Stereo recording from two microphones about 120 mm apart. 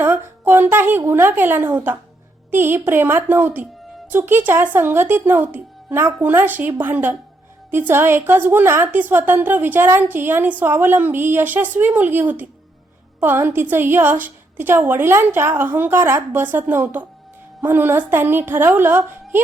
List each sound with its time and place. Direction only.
0.0 s a woman's voice: 20° right (ahead or behind)